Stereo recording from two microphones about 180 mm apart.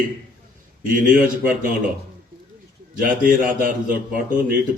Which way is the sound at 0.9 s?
50° right (ahead or behind).